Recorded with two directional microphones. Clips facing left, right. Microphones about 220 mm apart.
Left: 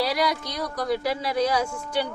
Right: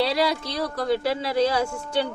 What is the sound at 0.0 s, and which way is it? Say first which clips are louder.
Speech: right 2 dB; 25° right (ahead or behind).